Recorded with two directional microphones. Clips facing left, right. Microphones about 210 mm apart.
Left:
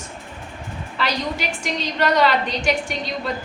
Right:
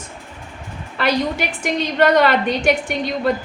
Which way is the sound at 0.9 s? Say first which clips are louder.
Right 6 dB; 55° right (ahead or behind).